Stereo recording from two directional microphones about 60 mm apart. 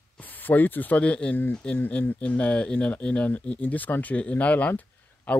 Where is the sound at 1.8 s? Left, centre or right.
Left.